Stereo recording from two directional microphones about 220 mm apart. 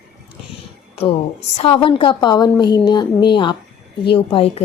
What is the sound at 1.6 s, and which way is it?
A woman's voice, 25° left (ahead or behind).